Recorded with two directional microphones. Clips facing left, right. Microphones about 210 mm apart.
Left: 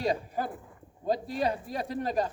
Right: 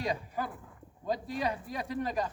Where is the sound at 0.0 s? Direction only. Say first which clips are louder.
Left 4 dB; 30° left (ahead or behind).